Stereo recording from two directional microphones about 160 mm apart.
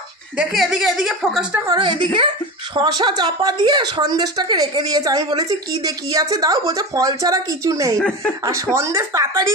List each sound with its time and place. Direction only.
0.4 s a woman's voice: 5° right (ahead or behind)
1.7 s a woman's voice: 30° right (ahead or behind)